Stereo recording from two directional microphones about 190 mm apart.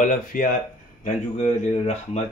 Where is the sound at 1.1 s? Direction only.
35° left (ahead or behind).